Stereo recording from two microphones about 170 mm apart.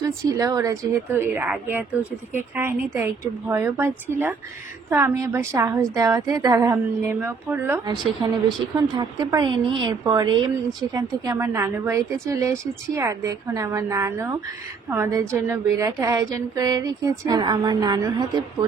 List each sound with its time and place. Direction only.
0.0 s a woman's voice: 20° right (ahead or behind)